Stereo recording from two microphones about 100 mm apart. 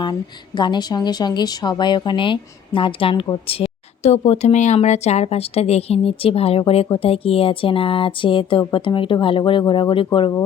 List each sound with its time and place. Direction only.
0.0 s a woman's voice: 50° left (ahead or behind)